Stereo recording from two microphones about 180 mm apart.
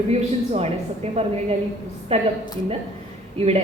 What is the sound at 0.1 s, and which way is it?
Speech, 35° right (ahead or behind).